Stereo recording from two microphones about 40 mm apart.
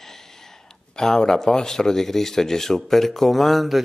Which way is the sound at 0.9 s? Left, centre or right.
Centre.